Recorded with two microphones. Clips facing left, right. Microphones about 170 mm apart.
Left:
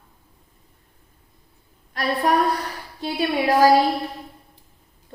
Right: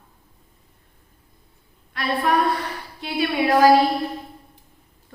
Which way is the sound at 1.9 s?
40° left (ahead or behind).